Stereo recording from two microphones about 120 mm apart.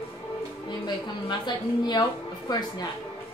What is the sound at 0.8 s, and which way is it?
A woman's voice, 35° left (ahead or behind).